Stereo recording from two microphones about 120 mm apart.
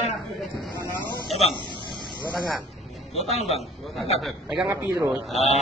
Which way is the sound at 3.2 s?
60° left (ahead or behind).